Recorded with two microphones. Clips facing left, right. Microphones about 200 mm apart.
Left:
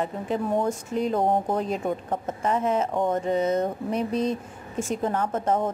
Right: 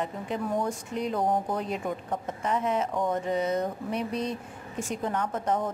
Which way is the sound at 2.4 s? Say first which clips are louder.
Left 4 dB; 45° left (ahead or behind).